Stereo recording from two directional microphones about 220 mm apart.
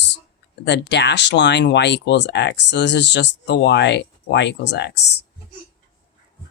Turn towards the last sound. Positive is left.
turn(degrees=50)  # may be behind; listen again after turning